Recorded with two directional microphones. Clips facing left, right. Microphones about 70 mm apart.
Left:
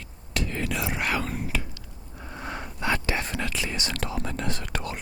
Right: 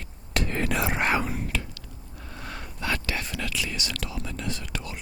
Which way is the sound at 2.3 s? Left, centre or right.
Left.